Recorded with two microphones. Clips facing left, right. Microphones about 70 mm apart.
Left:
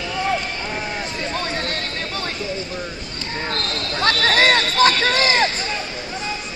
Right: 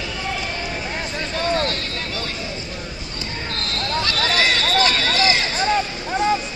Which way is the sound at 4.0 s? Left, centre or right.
Left.